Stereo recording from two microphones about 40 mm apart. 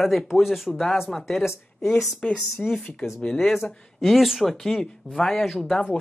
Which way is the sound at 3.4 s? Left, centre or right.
Centre.